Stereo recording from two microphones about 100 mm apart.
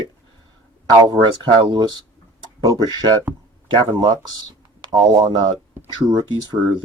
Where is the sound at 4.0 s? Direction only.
45° right (ahead or behind).